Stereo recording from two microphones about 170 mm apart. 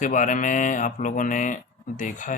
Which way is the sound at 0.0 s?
50° left (ahead or behind).